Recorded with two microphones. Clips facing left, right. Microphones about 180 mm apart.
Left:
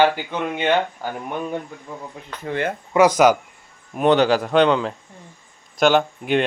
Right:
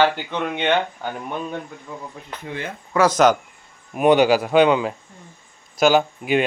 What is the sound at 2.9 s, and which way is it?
Speech, 15° left (ahead or behind).